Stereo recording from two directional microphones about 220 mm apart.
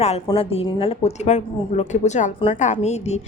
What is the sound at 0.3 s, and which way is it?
A woman's voice, 25° left (ahead or behind).